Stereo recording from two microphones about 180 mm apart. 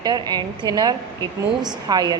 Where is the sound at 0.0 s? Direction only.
20° right (ahead or behind).